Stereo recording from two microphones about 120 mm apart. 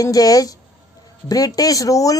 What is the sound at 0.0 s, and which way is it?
Speech, 30° left (ahead or behind).